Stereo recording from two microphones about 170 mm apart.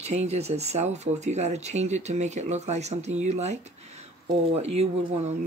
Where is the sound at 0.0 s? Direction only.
40° right (ahead or behind).